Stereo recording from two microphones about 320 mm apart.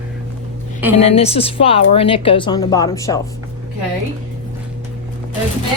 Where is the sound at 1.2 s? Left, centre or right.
Centre.